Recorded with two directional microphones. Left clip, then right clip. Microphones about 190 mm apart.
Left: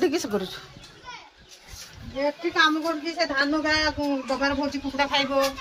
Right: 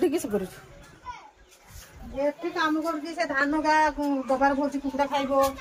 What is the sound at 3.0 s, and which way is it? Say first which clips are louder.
Speech: left 2 dB; 5° right (ahead or behind).